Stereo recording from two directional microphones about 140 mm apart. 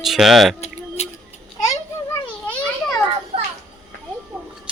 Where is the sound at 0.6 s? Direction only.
50° left (ahead or behind).